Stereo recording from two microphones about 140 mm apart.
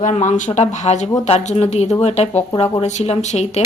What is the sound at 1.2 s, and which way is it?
Speech, 50° left (ahead or behind).